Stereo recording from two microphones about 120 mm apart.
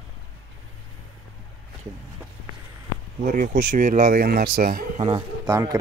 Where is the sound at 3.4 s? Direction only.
90° right.